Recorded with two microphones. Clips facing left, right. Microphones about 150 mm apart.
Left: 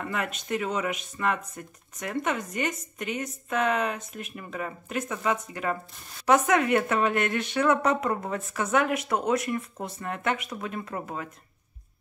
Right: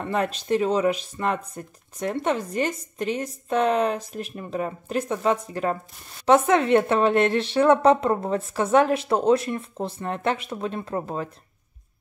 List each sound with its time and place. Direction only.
0.0 s speech: 30° right (ahead or behind)